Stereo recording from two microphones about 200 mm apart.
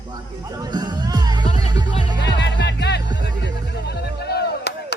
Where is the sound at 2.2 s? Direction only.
55° left (ahead or behind).